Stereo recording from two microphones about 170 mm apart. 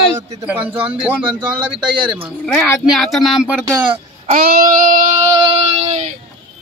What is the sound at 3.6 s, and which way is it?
Speech, 30° right (ahead or behind).